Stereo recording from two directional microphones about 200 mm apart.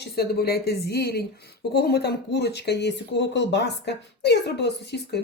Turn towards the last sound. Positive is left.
turn(degrees=55)  # may be behind; listen again after turning